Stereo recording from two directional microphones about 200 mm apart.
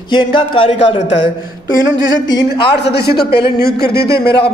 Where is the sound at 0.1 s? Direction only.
25° left (ahead or behind).